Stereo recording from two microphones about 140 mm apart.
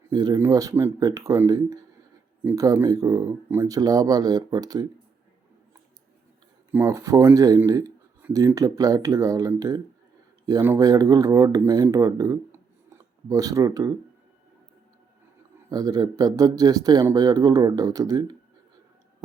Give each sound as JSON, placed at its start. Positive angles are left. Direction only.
{"t": 0.1, "sound": "speech", "side_deg": -30}
{"t": 6.7, "sound": "speech", "side_deg": -20}
{"t": 15.7, "sound": "speech", "side_deg": -30}